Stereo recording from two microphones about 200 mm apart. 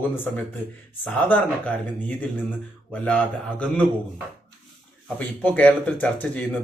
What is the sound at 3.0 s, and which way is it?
Speech, 5° left (ahead or behind).